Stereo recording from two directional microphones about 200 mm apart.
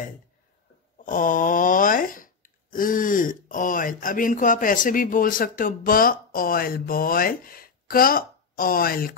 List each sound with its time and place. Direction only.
0.9 s speech: 40° left (ahead or behind)